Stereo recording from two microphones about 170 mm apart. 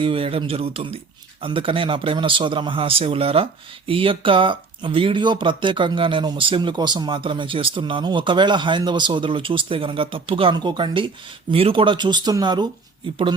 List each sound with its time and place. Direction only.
0.0 s speech: 30° right (ahead or behind)